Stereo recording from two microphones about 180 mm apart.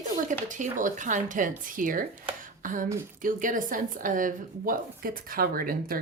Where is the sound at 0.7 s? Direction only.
45° right (ahead or behind).